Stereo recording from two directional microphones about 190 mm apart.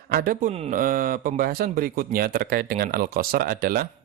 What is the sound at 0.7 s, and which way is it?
Speech, 50° right (ahead or behind).